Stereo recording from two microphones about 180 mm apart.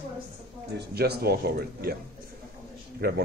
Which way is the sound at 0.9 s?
60° right (ahead or behind).